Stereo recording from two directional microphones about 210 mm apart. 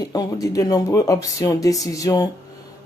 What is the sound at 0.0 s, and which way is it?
Speech, 15° left (ahead or behind).